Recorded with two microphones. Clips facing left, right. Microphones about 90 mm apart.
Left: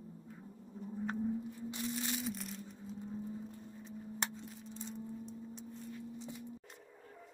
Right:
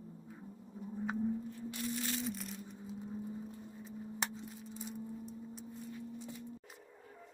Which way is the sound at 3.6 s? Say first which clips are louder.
Right 1 dB; 10° right (ahead or behind).